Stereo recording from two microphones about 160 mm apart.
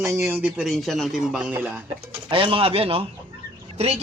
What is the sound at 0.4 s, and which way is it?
Speech, 5° right (ahead or behind).